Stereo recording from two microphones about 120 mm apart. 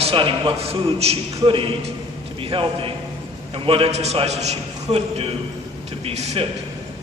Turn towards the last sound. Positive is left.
turn(degrees=-65)  # may be behind; listen again after turning